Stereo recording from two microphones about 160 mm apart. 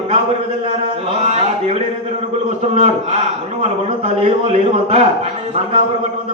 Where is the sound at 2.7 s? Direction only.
40° right (ahead or behind).